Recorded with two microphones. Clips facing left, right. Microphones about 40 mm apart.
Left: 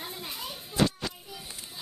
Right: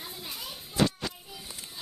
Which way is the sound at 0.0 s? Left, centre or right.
Centre.